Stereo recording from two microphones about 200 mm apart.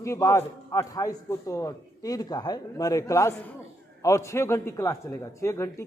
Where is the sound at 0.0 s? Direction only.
15° left (ahead or behind).